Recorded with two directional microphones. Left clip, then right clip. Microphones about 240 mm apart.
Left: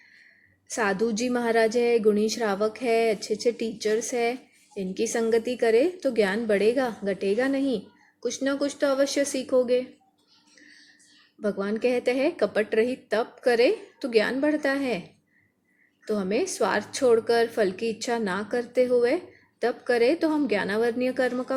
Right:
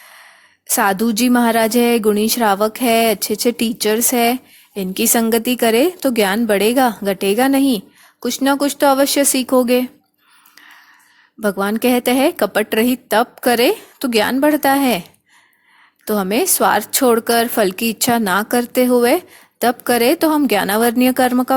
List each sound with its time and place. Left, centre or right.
0.7 s a woman's voice: right
11.3 s a woman's voice: right
16.0 s a woman's voice: right